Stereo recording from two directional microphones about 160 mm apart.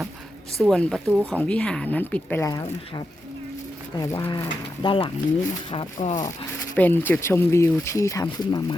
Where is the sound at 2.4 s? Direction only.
20° left (ahead or behind).